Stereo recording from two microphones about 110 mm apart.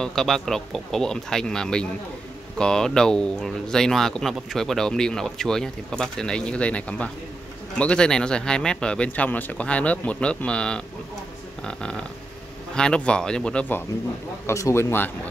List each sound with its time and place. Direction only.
0.0 s speech: 5° left (ahead or behind)
14.4 s speech: 25° left (ahead or behind)